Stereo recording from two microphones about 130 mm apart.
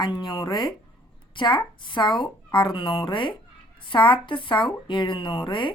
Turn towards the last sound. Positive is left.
turn(degrees=40)  # may be behind; listen again after turning